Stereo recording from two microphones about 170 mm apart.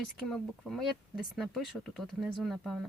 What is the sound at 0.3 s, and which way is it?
Speech, centre (ahead or behind).